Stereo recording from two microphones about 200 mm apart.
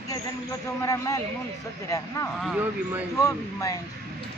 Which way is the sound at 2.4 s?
5° right (ahead or behind).